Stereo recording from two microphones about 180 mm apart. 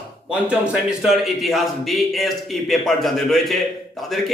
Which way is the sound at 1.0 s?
Centre (ahead or behind).